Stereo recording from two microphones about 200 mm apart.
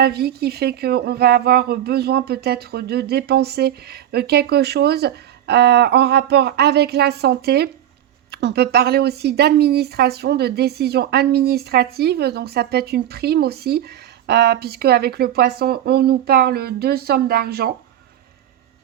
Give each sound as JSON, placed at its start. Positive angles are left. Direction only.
{"t": 0.0, "sound": "speech", "side_deg": -55}